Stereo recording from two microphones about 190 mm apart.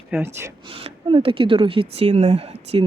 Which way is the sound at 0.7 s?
30° right (ahead or behind).